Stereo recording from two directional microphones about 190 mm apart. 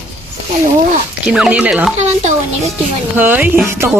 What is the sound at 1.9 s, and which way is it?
Speech, 40° right (ahead or behind).